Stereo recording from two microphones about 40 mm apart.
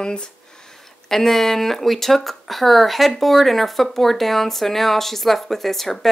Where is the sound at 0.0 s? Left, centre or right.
Left.